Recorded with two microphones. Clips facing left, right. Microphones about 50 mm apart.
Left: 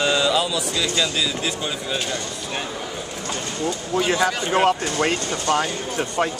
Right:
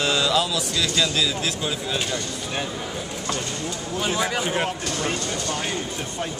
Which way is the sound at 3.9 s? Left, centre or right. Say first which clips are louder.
Left 5 dB; left.